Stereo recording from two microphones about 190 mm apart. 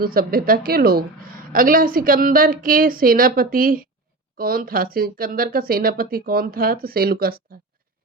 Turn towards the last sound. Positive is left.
turn(degrees=-50)  # may be behind; listen again after turning